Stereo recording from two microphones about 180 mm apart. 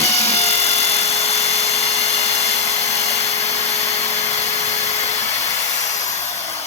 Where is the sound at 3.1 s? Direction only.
35° left (ahead or behind).